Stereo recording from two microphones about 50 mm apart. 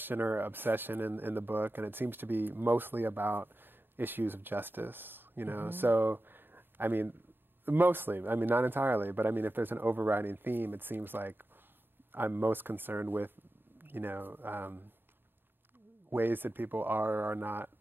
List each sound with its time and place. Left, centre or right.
0.0 s a man's voice: right
16.1 s a man's voice: right